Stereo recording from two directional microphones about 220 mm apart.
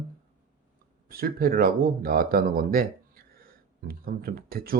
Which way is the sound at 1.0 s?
40° right (ahead or behind).